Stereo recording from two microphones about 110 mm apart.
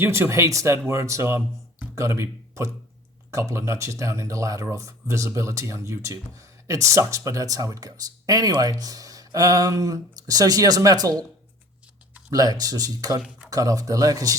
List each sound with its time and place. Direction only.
0.0 s speech: 25° right (ahead or behind)
12.3 s speech: 35° right (ahead or behind)